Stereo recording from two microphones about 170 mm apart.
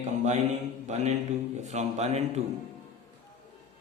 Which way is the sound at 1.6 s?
40° right (ahead or behind).